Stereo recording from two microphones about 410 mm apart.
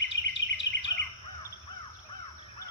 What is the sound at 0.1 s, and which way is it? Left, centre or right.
Insect, left.